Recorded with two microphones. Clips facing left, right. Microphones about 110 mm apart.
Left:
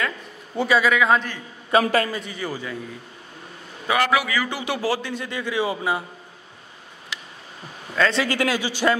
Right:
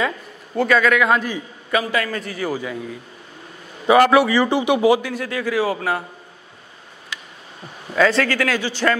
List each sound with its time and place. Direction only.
0.6 s a man's voice: 5° left (ahead or behind)
1.7 s a man's voice: 40° left (ahead or behind)
2.2 s a man's voice: 5° right (ahead or behind)
3.8 s a man's voice: 25° right (ahead or behind)
4.6 s speech: 15° right (ahead or behind)
5.0 s a man's voice: 5° right (ahead or behind)
7.9 s a man's voice: centre (ahead or behind)
8.3 s a man's voice: 15° left (ahead or behind)